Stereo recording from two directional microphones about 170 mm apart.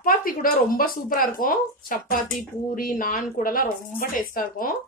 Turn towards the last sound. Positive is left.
turn(degrees=55)  # may be behind; listen again after turning